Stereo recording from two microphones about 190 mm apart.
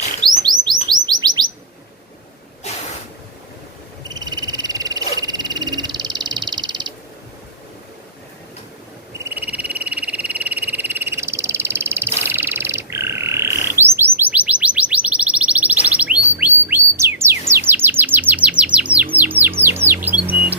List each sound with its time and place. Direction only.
0.3 s chirp: 20° right (ahead or behind)
4.1 s frog: 20° right (ahead or behind)
9.1 s frog: 10° right (ahead or behind)
16.4 s bird: 10° right (ahead or behind)
17.5 s chirp: 10° right (ahead or behind)
19.2 s bird: 10° right (ahead or behind)